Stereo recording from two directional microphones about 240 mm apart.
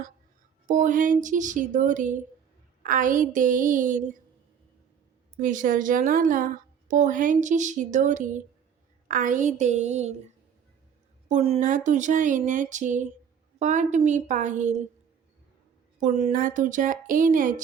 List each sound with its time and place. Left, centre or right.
0.7 s a woman's voice: right
5.4 s a woman's voice: right
11.3 s a woman's voice: right
16.0 s a woman's voice: right